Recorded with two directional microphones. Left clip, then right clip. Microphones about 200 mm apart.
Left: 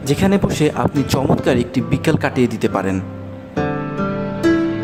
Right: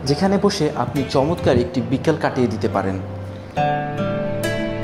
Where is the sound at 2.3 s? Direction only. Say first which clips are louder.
Left 2 dB; 50° left (ahead or behind).